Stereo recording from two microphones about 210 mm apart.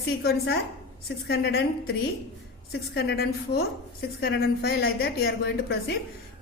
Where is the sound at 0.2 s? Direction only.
50° left (ahead or behind).